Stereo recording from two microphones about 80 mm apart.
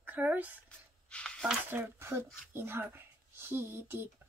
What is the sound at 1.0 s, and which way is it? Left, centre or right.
Speech, centre.